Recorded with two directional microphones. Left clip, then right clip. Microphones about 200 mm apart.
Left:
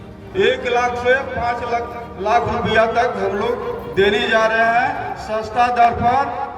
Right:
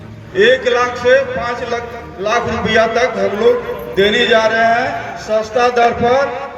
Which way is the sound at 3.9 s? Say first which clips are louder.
Right 4 dB; 60° left (ahead or behind).